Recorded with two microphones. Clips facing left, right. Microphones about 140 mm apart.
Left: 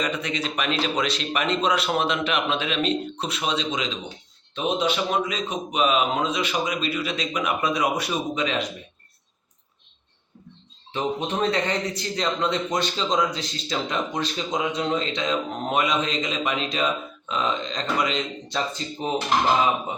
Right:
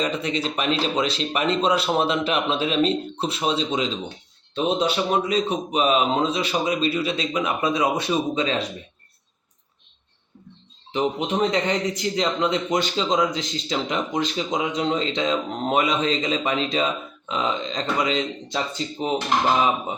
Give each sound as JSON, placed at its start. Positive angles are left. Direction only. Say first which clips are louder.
{"t": 0.0, "sound": "a man's voice", "louder": "right 3 dB", "side_deg": -30}
{"t": 10.9, "sound": "speech", "louder": "right 3 dB", "side_deg": -15}